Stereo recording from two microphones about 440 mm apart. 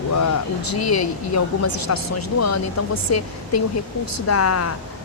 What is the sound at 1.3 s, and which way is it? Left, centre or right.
Speech, left.